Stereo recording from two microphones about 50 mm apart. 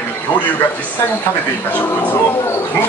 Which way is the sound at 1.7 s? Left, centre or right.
Left.